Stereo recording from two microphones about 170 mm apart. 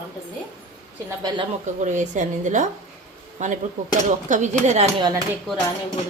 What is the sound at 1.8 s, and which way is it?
A woman's voice, 45° right (ahead or behind).